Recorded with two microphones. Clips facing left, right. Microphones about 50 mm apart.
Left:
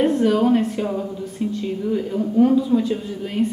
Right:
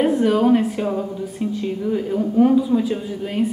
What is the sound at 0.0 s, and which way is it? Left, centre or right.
A woman's voice, centre.